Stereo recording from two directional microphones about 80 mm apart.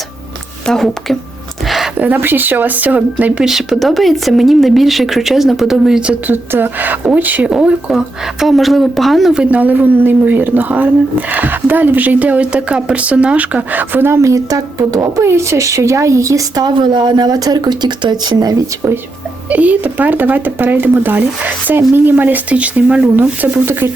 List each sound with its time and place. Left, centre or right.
0.6 s speech: centre
1.6 s a sound: centre
2.0 s speech: right
3.4 s speech: centre
6.0 s speech: centre
6.3 s speech: right
7.5 s speech: centre
9.3 s speech: centre; by 16.6 s right
16.6 s speech: right
18.8 s speech: right